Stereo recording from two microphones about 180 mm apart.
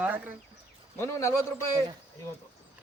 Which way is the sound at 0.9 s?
15° left (ahead or behind).